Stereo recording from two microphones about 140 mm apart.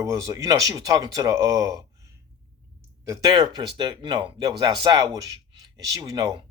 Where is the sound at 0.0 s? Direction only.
20° right (ahead or behind).